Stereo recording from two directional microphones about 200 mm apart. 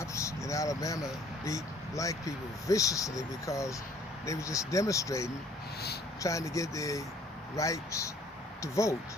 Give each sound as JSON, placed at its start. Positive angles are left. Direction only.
{"t": 0.0, "sound": "vehicle", "side_deg": 15}
{"t": 1.5, "sound": "speech", "side_deg": 15}